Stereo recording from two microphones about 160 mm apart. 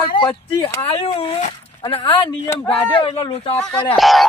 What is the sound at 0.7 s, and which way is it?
Speech, 35° left (ahead or behind).